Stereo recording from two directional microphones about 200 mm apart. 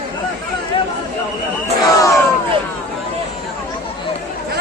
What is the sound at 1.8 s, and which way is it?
Crowd, 15° left (ahead or behind).